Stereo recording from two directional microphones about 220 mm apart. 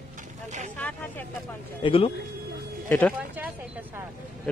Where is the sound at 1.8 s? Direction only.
25° left (ahead or behind).